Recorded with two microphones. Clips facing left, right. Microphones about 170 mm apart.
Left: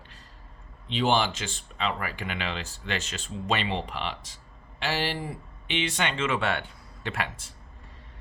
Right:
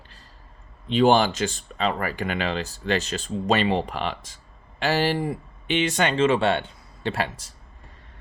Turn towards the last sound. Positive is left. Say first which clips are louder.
# right 6 dB
turn(degrees=-35)  # may be behind; listen again after turning